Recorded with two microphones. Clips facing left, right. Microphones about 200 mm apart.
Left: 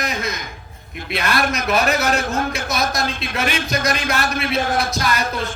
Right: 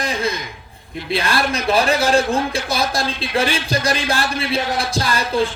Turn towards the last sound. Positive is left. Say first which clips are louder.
# right 3 dB
turn(degrees=-30)  # may be behind; listen again after turning